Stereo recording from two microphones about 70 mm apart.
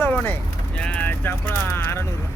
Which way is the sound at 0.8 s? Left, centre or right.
Centre.